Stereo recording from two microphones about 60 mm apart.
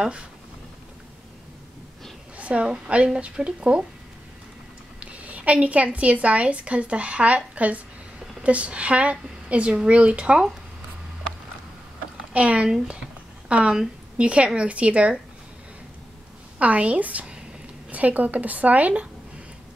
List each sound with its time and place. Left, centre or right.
2.3 s a woman's voice: right
5.0 s a woman's voice: right
12.3 s a woman's voice: right
16.5 s a woman's voice: right